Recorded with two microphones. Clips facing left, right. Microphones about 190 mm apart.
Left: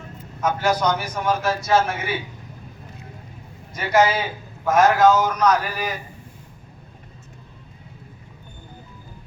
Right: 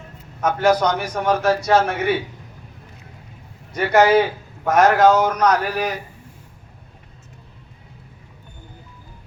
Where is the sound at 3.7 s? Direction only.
60° right (ahead or behind).